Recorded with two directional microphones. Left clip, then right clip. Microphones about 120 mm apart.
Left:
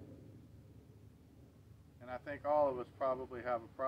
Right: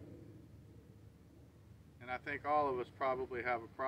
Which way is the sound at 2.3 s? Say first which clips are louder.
Left 2 dB; 15° left (ahead or behind).